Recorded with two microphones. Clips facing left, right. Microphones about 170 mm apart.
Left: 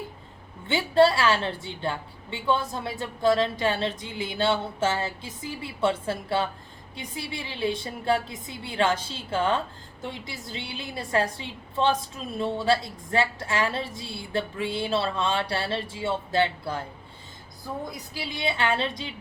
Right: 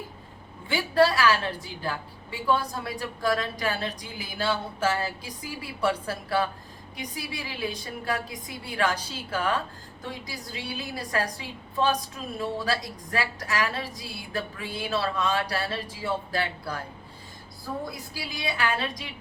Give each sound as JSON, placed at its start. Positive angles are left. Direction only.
{"t": 0.7, "sound": "a woman's voice", "side_deg": 25}
{"t": 17.9, "sound": "a woman's voice", "side_deg": 25}